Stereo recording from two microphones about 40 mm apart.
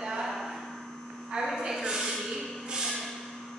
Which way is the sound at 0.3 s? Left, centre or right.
Centre.